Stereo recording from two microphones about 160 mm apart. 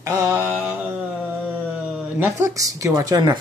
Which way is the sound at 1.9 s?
5° right (ahead or behind).